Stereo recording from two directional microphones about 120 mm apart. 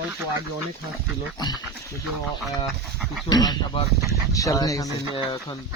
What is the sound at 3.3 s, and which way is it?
Speech, 35° left (ahead or behind).